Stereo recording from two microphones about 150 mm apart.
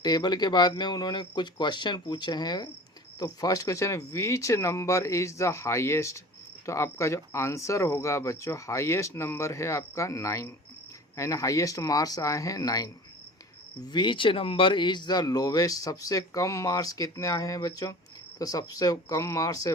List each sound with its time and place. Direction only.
0.0 s speech: 30° left (ahead or behind)
13.9 s speech: 30° left (ahead or behind)